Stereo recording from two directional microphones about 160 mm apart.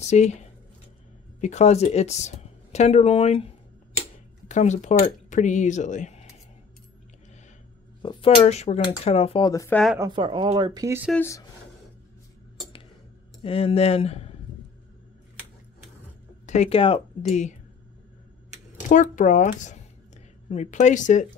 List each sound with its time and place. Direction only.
0.0 s speech: 45° left (ahead or behind)
4.5 s speech: 50° left (ahead or behind)
8.0 s a sound: 30° left (ahead or behind)
8.5 s speech: 45° left (ahead or behind)
9.5 s speech: 20° left (ahead or behind)
9.9 s speech: 25° right (ahead or behind)
11.1 s speech: 20° left (ahead or behind)
13.4 s speech: 35° left (ahead or behind)
16.4 s speech: 45° left (ahead or behind)
18.8 s speech: 50° left (ahead or behind)